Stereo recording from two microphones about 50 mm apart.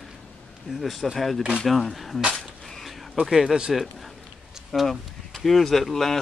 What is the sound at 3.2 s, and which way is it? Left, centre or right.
Speech, centre.